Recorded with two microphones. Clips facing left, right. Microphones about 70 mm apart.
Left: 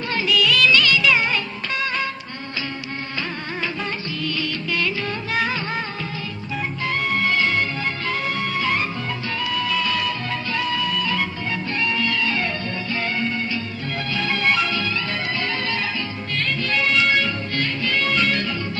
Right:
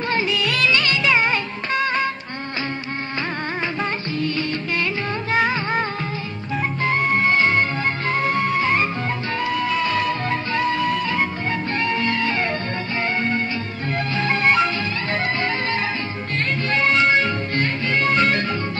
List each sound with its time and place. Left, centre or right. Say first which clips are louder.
0.1 s music of bollywood: left 3 dB; right
3.6 s music: right 3 dB; right